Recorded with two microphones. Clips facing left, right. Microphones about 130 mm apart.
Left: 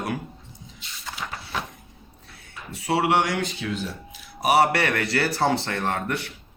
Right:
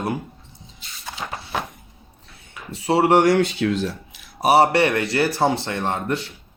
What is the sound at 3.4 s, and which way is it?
Speech, 80° right.